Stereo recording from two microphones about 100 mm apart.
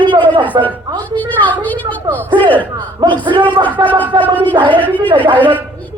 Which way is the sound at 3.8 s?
45° right (ahead or behind).